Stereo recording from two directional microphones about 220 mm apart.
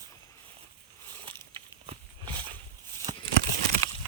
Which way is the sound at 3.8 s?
15° left (ahead or behind).